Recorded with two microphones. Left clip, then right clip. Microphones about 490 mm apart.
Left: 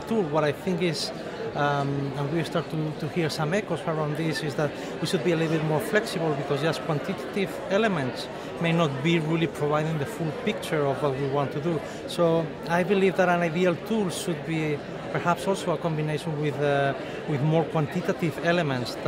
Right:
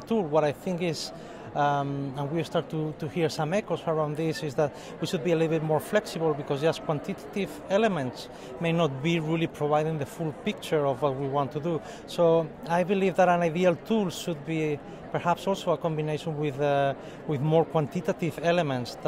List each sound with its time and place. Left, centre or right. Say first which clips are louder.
0.1 s speech: even; right
3.2 s speech: even; right